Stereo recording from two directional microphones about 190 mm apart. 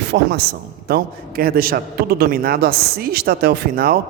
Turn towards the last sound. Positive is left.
turn(degrees=-50)  # may be behind; listen again after turning